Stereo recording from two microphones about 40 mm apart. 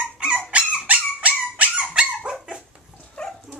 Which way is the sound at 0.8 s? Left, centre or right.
Right.